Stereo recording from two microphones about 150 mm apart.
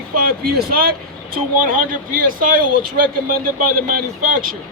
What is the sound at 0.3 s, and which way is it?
Speech, 85° right.